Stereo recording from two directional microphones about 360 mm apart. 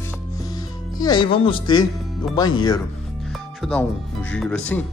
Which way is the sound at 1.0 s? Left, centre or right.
Centre.